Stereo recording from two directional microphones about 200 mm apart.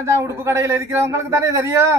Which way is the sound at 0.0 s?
15° right (ahead or behind).